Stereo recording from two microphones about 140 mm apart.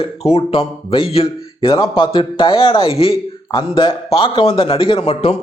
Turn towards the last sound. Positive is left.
turn(degrees=45)  # may be behind; listen again after turning